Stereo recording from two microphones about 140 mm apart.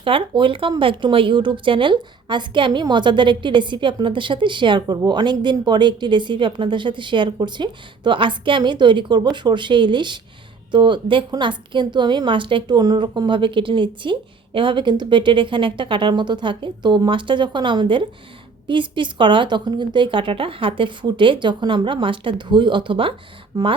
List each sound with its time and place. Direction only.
0.0 s a woman's voice: 40° right (ahead or behind)
23.5 s speech: 25° right (ahead or behind)